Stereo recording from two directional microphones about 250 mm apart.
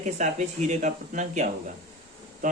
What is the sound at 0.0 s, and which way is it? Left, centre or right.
Speech, right.